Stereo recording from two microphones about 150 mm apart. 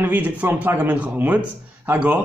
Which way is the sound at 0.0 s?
10° right (ahead or behind).